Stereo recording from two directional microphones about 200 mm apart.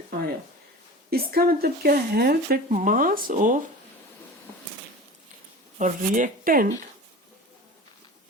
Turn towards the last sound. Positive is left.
turn(degrees=-45)  # may be behind; listen again after turning